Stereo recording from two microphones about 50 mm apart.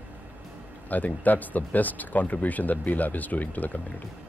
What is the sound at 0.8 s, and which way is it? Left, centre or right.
Speech, left.